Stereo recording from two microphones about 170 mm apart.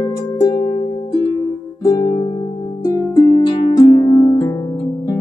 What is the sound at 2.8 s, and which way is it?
Harp, 25° left (ahead or behind).